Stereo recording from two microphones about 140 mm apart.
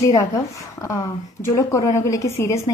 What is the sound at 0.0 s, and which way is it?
A woman's voice, 25° left (ahead or behind).